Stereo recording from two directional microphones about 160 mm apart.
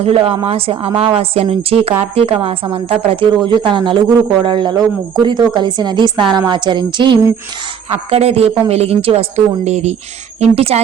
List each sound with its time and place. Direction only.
0.0 s a woman's voice: 35° right (ahead or behind)